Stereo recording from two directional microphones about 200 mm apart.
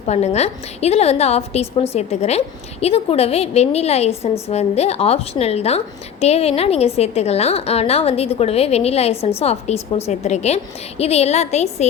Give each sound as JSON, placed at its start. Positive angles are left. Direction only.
{"t": 0.0, "sound": "a woman's voice", "side_deg": 35}